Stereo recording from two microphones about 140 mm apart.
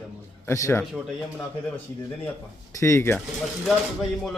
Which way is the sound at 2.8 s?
20° left (ahead or behind).